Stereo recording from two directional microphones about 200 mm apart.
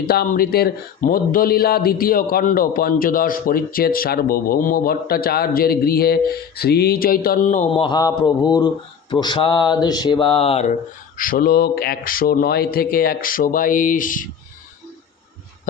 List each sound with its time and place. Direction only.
0.0 s speech: 50° left (ahead or behind)
7.8 s mantra: 20° left (ahead or behind)
11.2 s speech: 45° left (ahead or behind)